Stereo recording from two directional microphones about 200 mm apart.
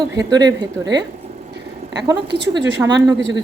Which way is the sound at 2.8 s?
20° right (ahead or behind).